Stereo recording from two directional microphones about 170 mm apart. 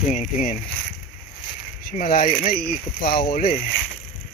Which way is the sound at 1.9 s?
55° left (ahead or behind).